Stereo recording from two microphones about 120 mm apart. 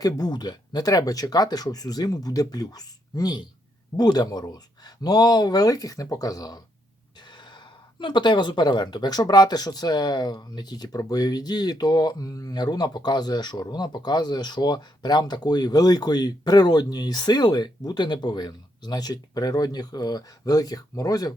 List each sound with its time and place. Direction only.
0.0 s speech: 35° left (ahead or behind)
7.9 s speech: 40° left (ahead or behind)